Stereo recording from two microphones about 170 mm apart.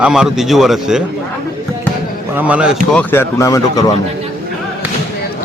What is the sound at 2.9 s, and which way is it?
Speech, 10° left (ahead or behind).